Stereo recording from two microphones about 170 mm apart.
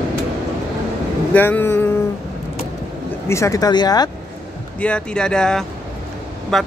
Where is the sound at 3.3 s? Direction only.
20° left (ahead or behind).